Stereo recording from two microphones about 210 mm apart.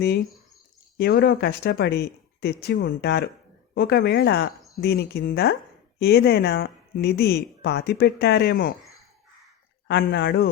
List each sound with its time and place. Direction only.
0.9 s speech: 50° left (ahead or behind)
9.8 s speech: 45° left (ahead or behind)